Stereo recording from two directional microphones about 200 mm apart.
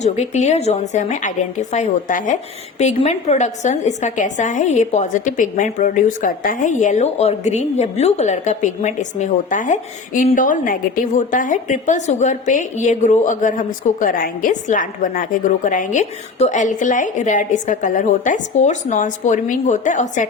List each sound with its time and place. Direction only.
0.0 s a woman's voice: 35° left (ahead or behind)